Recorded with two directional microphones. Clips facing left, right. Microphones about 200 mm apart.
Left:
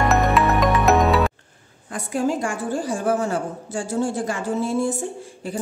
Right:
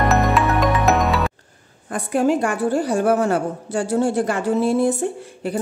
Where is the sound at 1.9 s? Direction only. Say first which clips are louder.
Right 4 dB; 55° right (ahead or behind).